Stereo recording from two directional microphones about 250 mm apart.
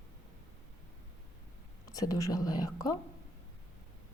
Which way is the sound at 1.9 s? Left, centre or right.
Centre.